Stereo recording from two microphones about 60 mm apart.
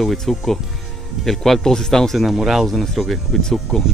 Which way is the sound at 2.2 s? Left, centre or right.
Centre.